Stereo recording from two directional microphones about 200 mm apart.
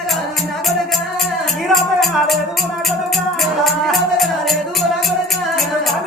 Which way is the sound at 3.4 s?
Centre (ahead or behind).